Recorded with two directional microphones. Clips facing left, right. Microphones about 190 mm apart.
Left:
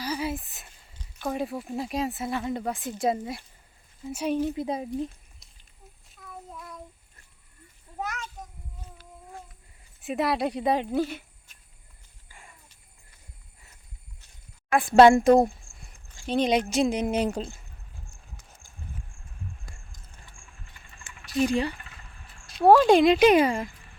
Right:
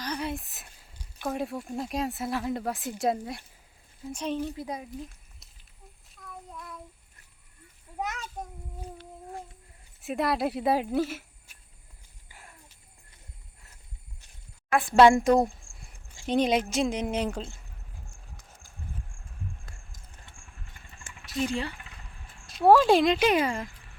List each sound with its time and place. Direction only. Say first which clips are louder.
0.0 s a sound: left 2 dB; 5° left (ahead or behind)
1.3 s a woman's voice: left 2 dB; centre (ahead or behind); by 4.9 s 25° left (ahead or behind)
6.1 s child singing: left 2 dB; centre (ahead or behind)
7.9 s a sound: even; 20° right (ahead or behind)
10.0 s speech: left 1 dB; centre (ahead or behind)
12.3 s a sound: even; 5° right (ahead or behind)
15.1 s speech: left 4 dB; 25° left (ahead or behind)
16.1 s a sound: right 1 dB; 20° right (ahead or behind)
16.4 s speech: left 3 dB; centre (ahead or behind)
21.3 s a woman's voice: left 5 dB; 15° left (ahead or behind)
22.4 s speech: left 2 dB; centre (ahead or behind)
23.1 s a woman's voice: left 6 dB; 15° left (ahead or behind)